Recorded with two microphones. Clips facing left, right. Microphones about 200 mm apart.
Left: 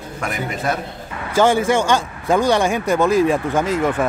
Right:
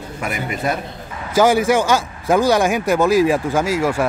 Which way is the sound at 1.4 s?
10° right (ahead or behind).